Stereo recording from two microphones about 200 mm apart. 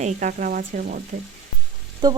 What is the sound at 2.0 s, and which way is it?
Frying, 20° right (ahead or behind).